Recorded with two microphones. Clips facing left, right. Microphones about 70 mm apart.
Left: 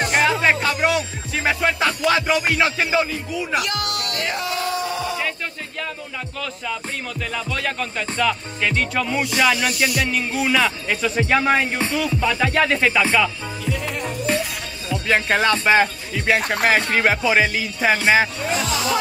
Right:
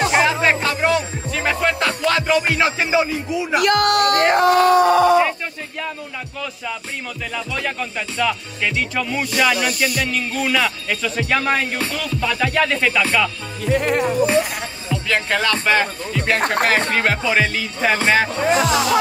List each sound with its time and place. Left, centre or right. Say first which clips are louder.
0.0 s music: right 2 dB; centre
2.6 s music: right 2 dB; centre
3.6 s speech: right 11 dB; right
7.3 s music: right 1 dB; centre
10.1 s speech: even; centre
13.7 s speech: right 9 dB; right
14.0 s music: right 6 dB; centre
15.0 s speech: left 2 dB; left
16.3 s speech: right 3 dB; right
16.9 s speech: left 1 dB; centre
18.4 s speech: right 6 dB; right